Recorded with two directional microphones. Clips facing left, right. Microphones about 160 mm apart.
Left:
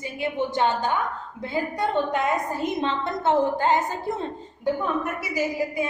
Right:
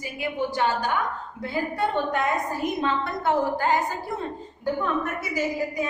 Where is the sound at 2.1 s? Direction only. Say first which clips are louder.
Left 1 dB; 25° left (ahead or behind).